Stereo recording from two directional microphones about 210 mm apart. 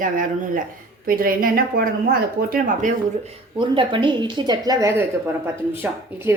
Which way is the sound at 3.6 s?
25° right (ahead or behind).